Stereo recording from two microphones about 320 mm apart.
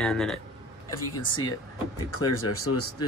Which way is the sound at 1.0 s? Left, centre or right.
Left.